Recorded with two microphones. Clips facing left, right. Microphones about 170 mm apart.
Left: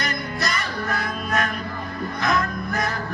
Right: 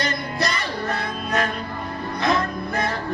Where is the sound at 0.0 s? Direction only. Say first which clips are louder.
Right 2 dB; 30° right (ahead or behind).